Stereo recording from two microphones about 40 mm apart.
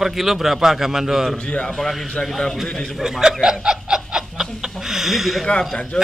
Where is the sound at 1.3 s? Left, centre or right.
Centre.